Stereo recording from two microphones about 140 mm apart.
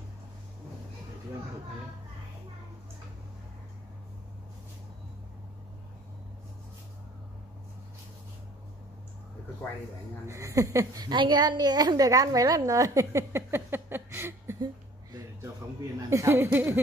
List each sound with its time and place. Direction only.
10.2 s a woman's voice: 20° right (ahead or behind)
16.1 s a woman's voice: 20° right (ahead or behind)